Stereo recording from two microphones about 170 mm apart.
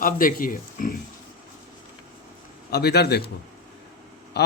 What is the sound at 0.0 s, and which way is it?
Speech, 55° left (ahead or behind).